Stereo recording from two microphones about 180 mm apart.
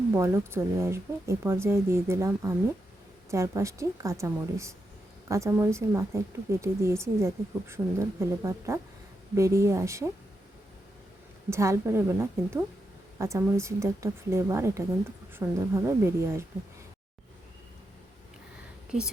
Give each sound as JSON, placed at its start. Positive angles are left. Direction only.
{"t": 0.2, "sound": "a woman's voice", "side_deg": -15}
{"t": 11.5, "sound": "a woman's voice", "side_deg": -15}
{"t": 18.9, "sound": "speech", "side_deg": -5}